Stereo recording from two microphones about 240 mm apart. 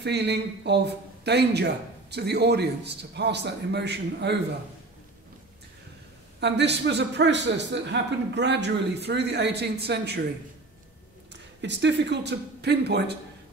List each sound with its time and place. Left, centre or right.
0.0 s speech: right
6.4 s speech: right
11.6 s speech: right